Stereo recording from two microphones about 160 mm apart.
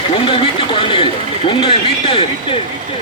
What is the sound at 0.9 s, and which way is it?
Speech, 35° left (ahead or behind).